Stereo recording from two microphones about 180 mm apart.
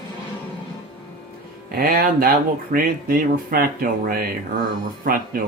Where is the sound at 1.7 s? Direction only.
55° right (ahead or behind).